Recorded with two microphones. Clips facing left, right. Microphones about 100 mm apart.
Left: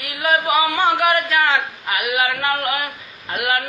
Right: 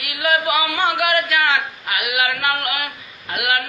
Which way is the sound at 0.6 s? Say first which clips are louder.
Left 3 dB; 30° left (ahead or behind).